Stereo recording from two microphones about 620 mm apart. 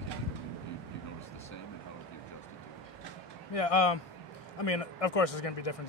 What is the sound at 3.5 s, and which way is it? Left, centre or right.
Speech, left.